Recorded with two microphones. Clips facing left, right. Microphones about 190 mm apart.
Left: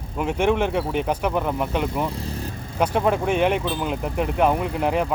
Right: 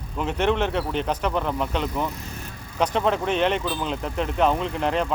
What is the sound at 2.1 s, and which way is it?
Vehicle, 30° left (ahead or behind).